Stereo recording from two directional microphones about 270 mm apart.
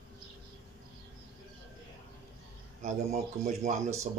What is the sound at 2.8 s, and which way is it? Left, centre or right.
Speech, right.